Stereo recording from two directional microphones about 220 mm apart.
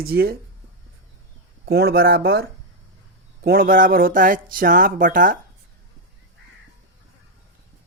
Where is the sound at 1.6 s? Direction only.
45° right (ahead or behind).